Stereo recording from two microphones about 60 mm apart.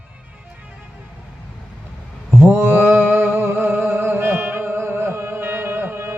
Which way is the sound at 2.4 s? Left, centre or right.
Right.